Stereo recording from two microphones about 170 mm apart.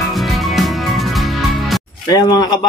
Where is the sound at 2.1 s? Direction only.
25° left (ahead or behind).